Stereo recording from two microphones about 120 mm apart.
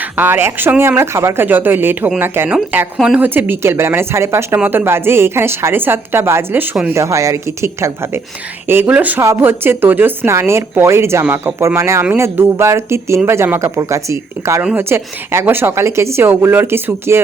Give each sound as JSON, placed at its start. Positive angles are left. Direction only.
{"t": 0.0, "sound": "a woman's voice", "side_deg": -15}